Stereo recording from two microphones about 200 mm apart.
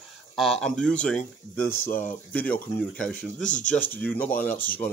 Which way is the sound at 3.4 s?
40° left (ahead or behind).